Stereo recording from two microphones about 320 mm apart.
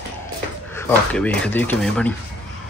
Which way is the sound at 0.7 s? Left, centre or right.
Centre.